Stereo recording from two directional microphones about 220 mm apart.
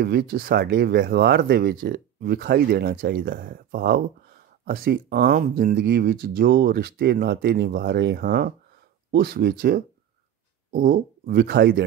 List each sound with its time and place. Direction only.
0.0 s speech: 45° right (ahead or behind)